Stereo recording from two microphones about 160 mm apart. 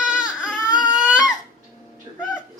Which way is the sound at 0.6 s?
25° left (ahead or behind).